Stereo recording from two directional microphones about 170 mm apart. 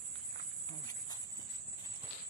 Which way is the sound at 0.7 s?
20° left (ahead or behind).